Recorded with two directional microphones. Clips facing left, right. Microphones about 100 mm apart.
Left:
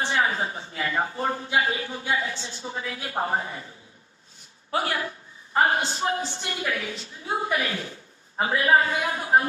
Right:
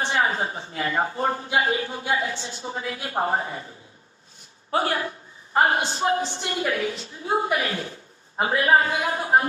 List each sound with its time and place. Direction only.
0.0 s a woman's voice: 30° right (ahead or behind)
4.7 s a woman's voice: 35° right (ahead or behind)